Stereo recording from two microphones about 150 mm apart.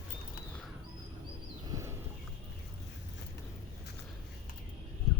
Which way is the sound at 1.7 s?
20° right (ahead or behind).